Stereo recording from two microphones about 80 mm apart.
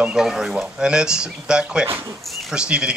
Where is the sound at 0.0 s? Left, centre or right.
Centre.